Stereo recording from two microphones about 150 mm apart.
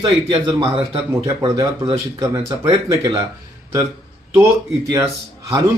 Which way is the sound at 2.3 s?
20° right (ahead or behind).